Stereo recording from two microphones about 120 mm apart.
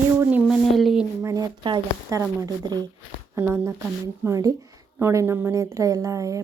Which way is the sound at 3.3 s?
20° right (ahead or behind).